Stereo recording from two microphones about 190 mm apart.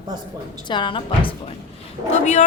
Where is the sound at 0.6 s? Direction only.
25° left (ahead or behind).